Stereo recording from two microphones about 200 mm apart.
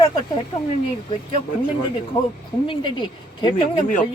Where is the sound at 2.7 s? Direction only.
25° left (ahead or behind).